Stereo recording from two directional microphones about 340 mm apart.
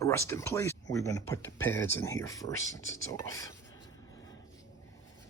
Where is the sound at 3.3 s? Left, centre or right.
Centre.